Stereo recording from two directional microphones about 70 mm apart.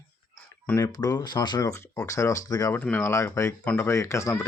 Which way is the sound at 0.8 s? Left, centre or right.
Left.